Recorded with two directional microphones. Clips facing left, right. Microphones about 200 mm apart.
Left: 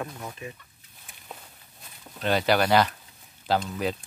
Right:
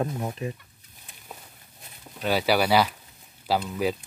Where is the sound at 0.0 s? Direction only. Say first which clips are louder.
Right 7 dB; 35° right (ahead or behind).